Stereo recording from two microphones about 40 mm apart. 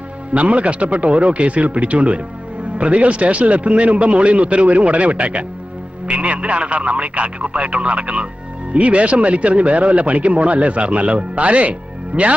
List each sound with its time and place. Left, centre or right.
0.3 s speech: right